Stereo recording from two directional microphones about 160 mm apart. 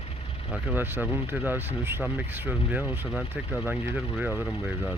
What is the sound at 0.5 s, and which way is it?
Speech, 10° right (ahead or behind).